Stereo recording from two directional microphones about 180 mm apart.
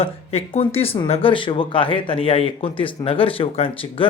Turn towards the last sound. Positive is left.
turn(degrees=30)  # may be behind; listen again after turning